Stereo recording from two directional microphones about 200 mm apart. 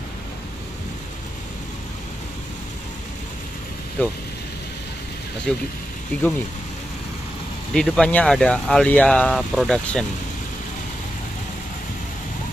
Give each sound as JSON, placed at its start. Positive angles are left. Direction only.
{"t": 4.0, "sound": "speech", "side_deg": 10}
{"t": 5.5, "sound": "speech", "side_deg": 0}
{"t": 7.7, "sound": "speech", "side_deg": 0}